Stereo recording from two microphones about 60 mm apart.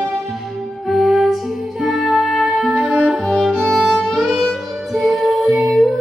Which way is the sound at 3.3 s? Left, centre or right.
Centre.